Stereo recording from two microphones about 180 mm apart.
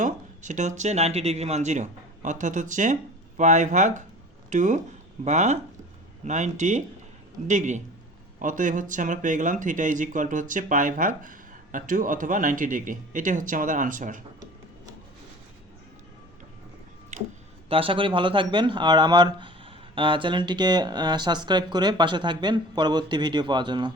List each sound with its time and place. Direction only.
0.0 s speech: 45° right (ahead or behind)
17.1 s a sound: 40° right (ahead or behind)
17.7 s speech: 30° right (ahead or behind)